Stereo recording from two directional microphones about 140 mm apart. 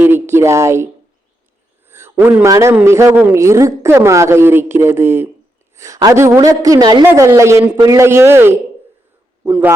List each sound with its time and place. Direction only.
0.0 s speech: 15° right (ahead or behind)
1.9 s a sound: 15° right (ahead or behind)
2.5 s a woman's voice: 20° right (ahead or behind)
7.0 s a woman's voice: 15° right (ahead or behind)